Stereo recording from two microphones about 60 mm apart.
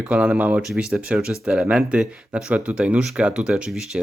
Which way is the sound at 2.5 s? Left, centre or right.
Right.